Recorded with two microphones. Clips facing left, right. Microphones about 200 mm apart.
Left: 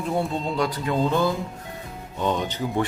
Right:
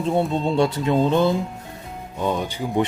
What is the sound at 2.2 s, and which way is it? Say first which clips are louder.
Speech: right 1 dB; 10° right (ahead or behind).